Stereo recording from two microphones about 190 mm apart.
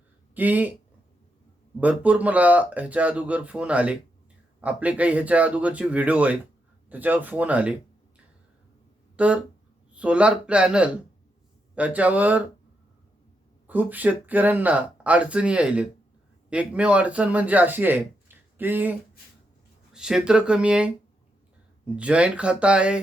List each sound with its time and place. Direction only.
0.3 s speech: 10° right (ahead or behind)
1.8 s speech: 5° right (ahead or behind)
9.1 s speech: 5° right (ahead or behind)
13.7 s speech: 10° right (ahead or behind)
21.9 s speech: 5° right (ahead or behind)